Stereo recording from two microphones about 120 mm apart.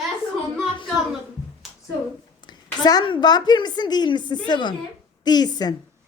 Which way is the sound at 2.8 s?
35° left (ahead or behind).